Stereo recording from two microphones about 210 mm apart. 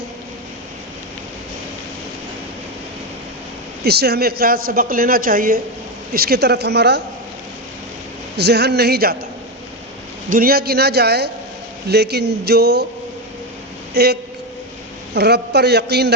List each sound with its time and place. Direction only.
3.8 s a woman's voice: 50° right (ahead or behind)
8.4 s a woman's voice: 50° right (ahead or behind)
10.2 s a woman's voice: 45° right (ahead or behind)
13.9 s a woman's voice: 50° right (ahead or behind)